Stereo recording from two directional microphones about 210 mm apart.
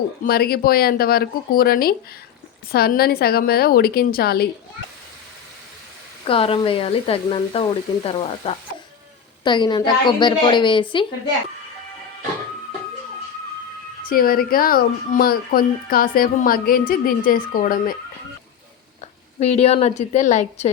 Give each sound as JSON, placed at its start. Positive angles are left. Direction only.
{"t": 0.3, "sound": "speech", "side_deg": 45}
{"t": 6.2, "sound": "speech", "side_deg": 25}
{"t": 14.0, "sound": "speech", "side_deg": 45}
{"t": 19.4, "sound": "a woman's voice", "side_deg": 30}